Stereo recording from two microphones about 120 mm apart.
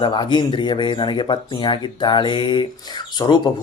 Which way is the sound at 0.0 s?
40° left (ahead or behind).